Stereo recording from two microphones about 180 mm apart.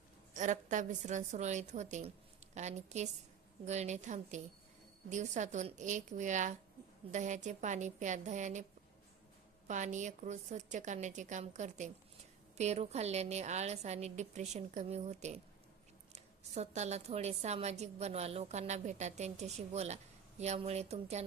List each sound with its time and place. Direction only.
0.3 s a woman's voice: 45° right (ahead or behind)
9.6 s a woman's voice: 40° right (ahead or behind)